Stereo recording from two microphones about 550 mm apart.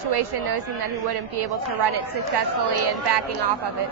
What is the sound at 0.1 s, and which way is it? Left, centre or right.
A woman's voice, right.